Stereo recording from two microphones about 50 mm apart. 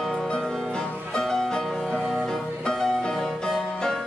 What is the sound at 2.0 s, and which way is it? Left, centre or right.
Music, centre.